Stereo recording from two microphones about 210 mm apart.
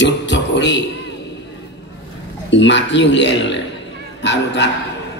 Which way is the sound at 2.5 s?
60° left (ahead or behind).